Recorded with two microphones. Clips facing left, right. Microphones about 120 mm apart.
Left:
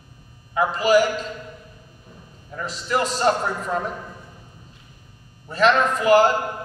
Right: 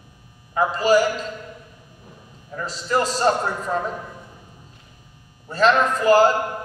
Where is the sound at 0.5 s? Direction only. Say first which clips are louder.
Even; 35° right (ahead or behind).